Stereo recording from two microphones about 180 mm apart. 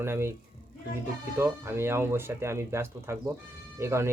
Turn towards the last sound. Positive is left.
turn(degrees=-15)  # may be behind; listen again after turning